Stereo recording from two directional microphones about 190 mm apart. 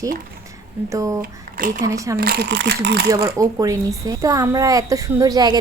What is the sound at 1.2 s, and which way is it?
Speech, 45° right (ahead or behind).